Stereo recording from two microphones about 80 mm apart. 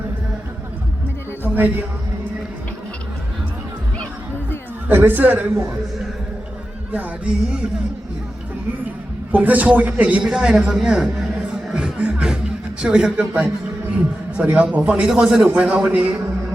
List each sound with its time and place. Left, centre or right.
1.5 s a man's voice: right
4.9 s a man's voice: right
6.9 s a man's voice: centre
9.3 s a man's voice: centre